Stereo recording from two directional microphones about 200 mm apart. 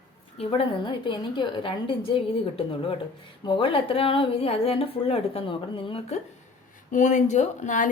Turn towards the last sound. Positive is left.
turn(degrees=40)  # may be behind; listen again after turning